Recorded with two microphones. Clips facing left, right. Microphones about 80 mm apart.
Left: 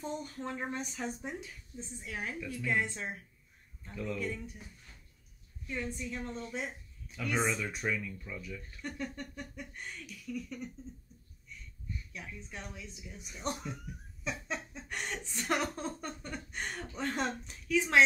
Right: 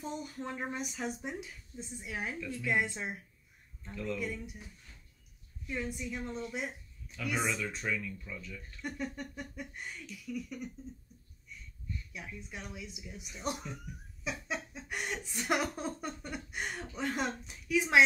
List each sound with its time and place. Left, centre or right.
0.0 s speech: centre
3.9 s speech: centre
5.7 s speech: centre
7.6 s speech: centre
8.8 s speech: centre
12.1 s speech: centre